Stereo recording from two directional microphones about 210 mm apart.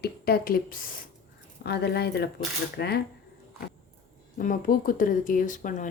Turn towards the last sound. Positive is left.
turn(degrees=40)  # may be behind; listen again after turning